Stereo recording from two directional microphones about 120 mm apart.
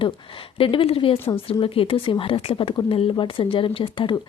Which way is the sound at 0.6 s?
50° left (ahead or behind).